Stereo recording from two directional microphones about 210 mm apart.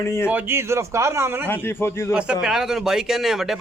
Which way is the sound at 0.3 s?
10° right (ahead or behind).